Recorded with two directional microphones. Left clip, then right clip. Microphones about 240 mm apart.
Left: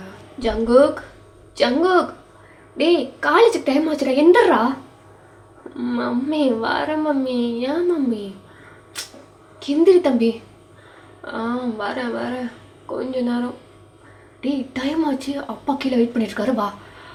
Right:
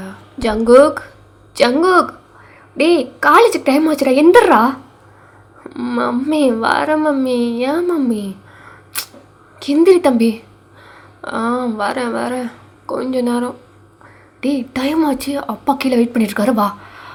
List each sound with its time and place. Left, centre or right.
0.3 s a woman's voice: right
5.7 s a woman's voice: right
9.6 s a woman's voice: right